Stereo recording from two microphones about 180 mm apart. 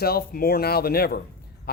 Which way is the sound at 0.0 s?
55° left (ahead or behind).